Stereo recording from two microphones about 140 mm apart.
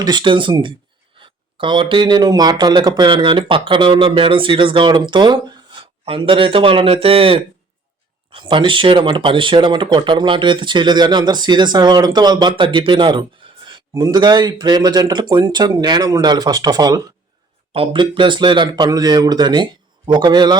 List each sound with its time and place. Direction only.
0.0 s speech: 35° right (ahead or behind)
17.7 s speech: 40° right (ahead or behind)